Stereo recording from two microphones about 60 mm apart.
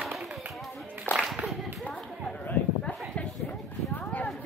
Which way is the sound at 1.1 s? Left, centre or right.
Left.